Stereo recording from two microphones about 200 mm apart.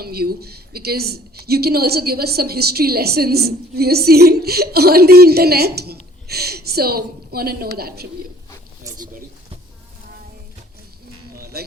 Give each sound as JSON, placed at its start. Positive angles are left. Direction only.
{"t": 0.0, "sound": "a woman's voice", "side_deg": -50}
{"t": 8.8, "sound": "a sound", "side_deg": -15}
{"t": 11.5, "sound": "speech", "side_deg": -50}